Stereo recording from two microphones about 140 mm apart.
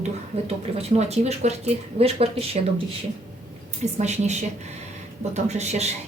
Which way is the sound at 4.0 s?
55° right (ahead or behind).